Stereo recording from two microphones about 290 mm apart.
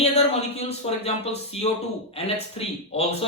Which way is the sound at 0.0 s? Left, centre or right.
Left.